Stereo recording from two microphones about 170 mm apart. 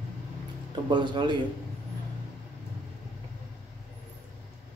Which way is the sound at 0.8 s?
25° right (ahead or behind).